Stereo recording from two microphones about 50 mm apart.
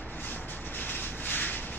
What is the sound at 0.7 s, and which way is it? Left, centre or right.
Vehicle, left.